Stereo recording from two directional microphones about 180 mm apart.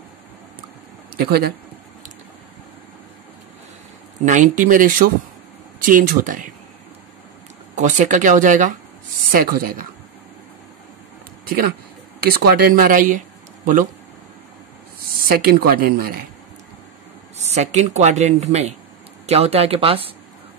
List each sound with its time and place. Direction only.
1.1 s speech: 60° right (ahead or behind)
4.2 s speech: 45° right (ahead or behind)
7.7 s speech: 45° right (ahead or behind)
11.4 s speech: 55° right (ahead or behind)
15.2 s speech: 55° right (ahead or behind)
17.4 s speech: 40° right (ahead or behind)